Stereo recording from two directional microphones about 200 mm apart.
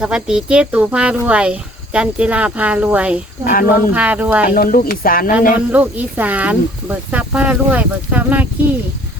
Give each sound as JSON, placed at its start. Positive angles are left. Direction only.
{"t": 0.0, "sound": "speech", "side_deg": -5}
{"t": 3.4, "sound": "speech", "side_deg": 45}
{"t": 3.9, "sound": "speech", "side_deg": -5}
{"t": 4.5, "sound": "speech", "side_deg": 45}
{"t": 5.5, "sound": "speech", "side_deg": -5}